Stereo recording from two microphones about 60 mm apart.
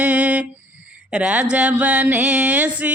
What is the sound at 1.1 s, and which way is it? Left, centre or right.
Mantra, centre.